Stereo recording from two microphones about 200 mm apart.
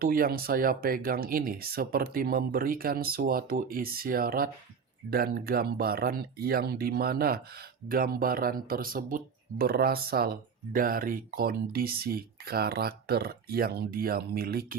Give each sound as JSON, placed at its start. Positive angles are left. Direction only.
{"t": 0.0, "sound": "speech", "side_deg": -45}